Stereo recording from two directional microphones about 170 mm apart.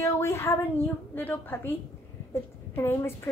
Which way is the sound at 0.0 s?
15° left (ahead or behind).